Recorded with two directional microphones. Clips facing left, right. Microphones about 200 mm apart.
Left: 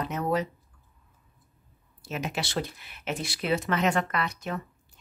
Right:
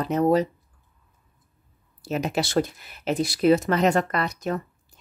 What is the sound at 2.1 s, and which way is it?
Speech, 40° right (ahead or behind).